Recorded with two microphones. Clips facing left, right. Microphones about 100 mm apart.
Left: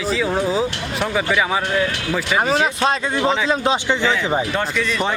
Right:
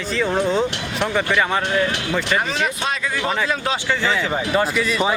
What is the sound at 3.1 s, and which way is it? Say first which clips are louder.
Speech: left 4 dB; 20° left (ahead or behind).